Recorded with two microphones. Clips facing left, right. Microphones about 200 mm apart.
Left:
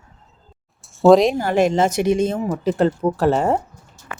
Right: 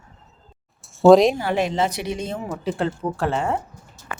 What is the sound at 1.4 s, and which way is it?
Speech, 45° left (ahead or behind).